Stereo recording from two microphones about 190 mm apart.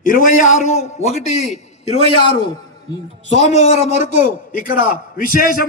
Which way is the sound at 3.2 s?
65° right (ahead or behind).